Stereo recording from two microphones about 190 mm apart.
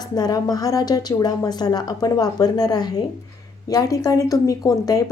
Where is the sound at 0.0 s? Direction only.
20° left (ahead or behind).